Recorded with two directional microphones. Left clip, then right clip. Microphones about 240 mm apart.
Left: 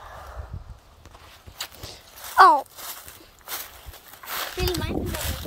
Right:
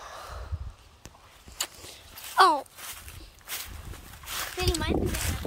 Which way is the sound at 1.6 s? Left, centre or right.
Centre.